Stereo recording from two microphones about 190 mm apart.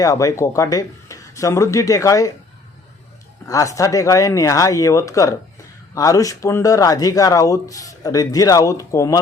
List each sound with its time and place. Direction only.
0.0 s speech: 20° left (ahead or behind)
3.4 s speech: 15° left (ahead or behind)